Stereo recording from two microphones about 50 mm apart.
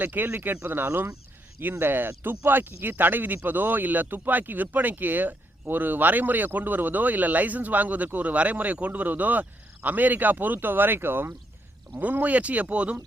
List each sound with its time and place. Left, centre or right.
0.0 s speech: right
12.2 s speech: right